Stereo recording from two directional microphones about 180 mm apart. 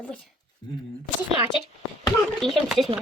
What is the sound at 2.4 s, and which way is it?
Speech, centre (ahead or behind).